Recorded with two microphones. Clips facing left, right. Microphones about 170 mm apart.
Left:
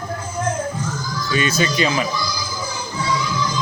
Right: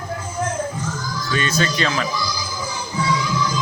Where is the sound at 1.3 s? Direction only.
10° left (ahead or behind).